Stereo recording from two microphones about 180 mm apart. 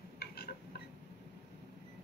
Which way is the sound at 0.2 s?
60° left (ahead or behind).